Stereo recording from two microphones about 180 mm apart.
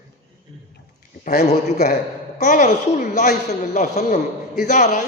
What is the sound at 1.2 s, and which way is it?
A man's voice, 50° left (ahead or behind).